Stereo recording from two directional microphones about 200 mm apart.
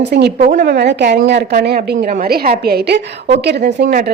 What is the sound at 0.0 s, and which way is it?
Speech, 55° right (ahead or behind).